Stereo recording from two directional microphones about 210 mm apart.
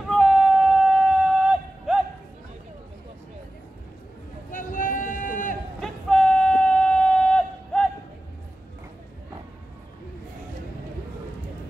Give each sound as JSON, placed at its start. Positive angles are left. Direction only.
{"t": 0.1, "sound": "a sound", "side_deg": 0}
{"t": 4.5, "sound": "run", "side_deg": 40}
{"t": 5.8, "sound": "yodeling", "side_deg": 0}